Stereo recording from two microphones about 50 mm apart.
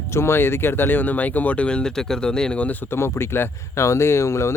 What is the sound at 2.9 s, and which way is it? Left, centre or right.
Speech, left.